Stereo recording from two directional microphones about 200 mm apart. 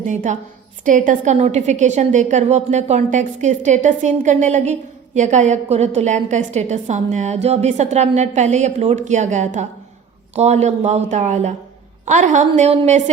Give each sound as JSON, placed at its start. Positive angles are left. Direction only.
{"t": 0.0, "sound": "a woman's voice", "side_deg": -40}